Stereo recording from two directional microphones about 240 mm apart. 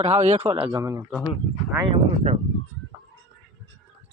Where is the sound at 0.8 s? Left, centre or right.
Centre.